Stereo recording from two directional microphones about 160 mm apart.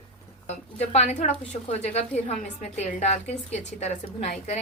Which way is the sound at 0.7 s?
45° left (ahead or behind).